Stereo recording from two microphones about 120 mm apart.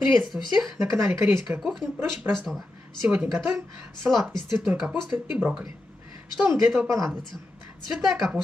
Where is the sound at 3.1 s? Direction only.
15° right (ahead or behind).